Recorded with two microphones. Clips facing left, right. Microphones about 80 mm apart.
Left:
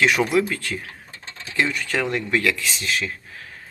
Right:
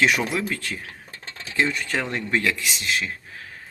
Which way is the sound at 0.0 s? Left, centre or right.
Right.